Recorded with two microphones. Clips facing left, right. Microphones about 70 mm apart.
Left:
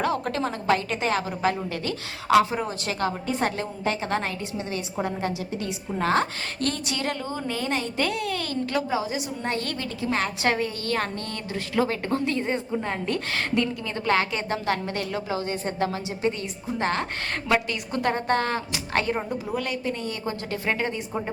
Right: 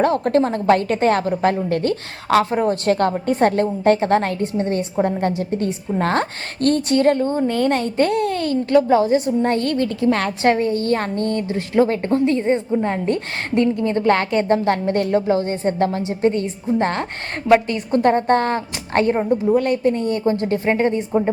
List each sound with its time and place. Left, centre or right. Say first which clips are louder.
0.0 s a woman's voice: right 9 dB; right
10.4 s a woman's voice: right 8 dB; right